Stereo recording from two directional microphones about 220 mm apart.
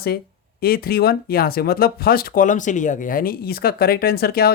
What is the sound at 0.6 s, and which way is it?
Speech, 45° left (ahead or behind).